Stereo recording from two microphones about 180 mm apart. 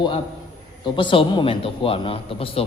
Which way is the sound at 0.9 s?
25° left (ahead or behind).